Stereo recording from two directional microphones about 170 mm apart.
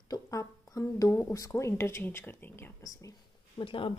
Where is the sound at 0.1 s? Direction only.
20° left (ahead or behind).